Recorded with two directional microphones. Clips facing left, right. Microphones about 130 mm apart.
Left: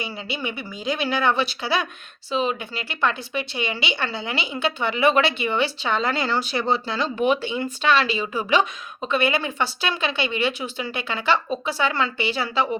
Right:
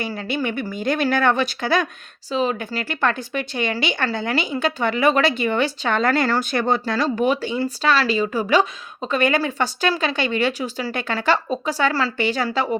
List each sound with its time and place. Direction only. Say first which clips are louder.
0.0 s speech: right 5 dB; 50° right (ahead or behind)